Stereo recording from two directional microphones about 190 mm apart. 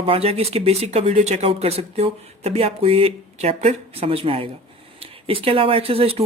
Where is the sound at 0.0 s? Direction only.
30° right (ahead or behind).